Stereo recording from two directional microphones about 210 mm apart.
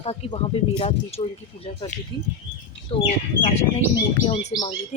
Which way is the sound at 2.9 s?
25° left (ahead or behind).